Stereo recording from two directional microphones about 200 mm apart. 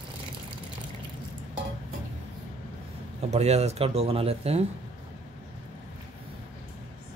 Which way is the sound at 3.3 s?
35° right (ahead or behind).